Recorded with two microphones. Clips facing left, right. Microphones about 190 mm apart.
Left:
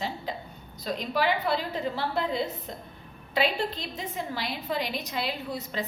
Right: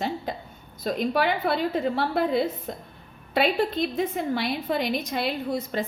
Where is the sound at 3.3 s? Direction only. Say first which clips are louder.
Right 4 dB; 55° right (ahead or behind).